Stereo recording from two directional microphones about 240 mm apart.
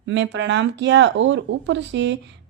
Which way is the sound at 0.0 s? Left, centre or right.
Right.